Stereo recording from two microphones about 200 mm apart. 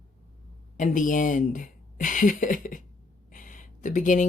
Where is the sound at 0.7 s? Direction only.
40° left (ahead or behind).